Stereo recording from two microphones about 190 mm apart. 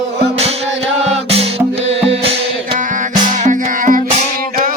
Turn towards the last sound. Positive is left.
turn(degrees=-45)  # may be behind; listen again after turning